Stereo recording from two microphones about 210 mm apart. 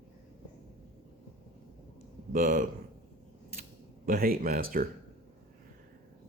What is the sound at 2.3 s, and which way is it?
Speech, 40° right (ahead or behind).